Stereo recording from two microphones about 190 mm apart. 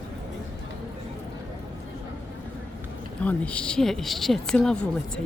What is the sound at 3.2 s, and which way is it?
A woman's voice, 5° left (ahead or behind).